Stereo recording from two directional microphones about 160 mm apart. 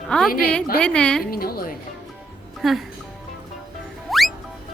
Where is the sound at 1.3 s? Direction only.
70° left (ahead or behind).